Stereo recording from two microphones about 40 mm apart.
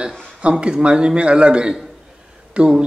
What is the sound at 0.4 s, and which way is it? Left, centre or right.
Speech, right.